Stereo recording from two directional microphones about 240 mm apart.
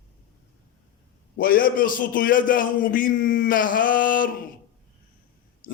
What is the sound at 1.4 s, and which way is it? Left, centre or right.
Speech, left.